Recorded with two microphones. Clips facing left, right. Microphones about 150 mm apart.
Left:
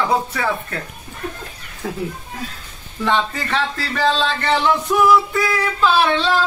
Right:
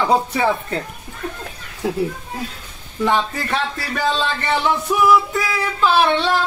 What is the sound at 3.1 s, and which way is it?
Speech, 10° right (ahead or behind).